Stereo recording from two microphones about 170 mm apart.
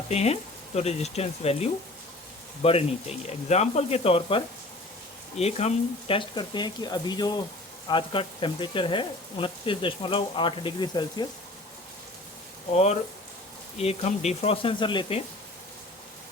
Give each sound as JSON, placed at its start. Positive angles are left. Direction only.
{"t": 0.1, "sound": "speech", "side_deg": 40}
{"t": 12.7, "sound": "speech", "side_deg": 40}